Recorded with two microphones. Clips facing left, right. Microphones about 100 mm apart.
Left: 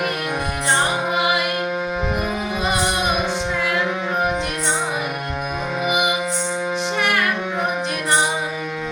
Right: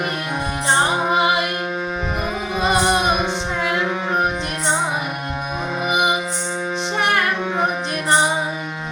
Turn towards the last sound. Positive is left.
turn(degrees=-30)  # may be behind; listen again after turning